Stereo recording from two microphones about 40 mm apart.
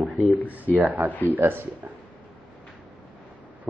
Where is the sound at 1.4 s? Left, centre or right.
Right.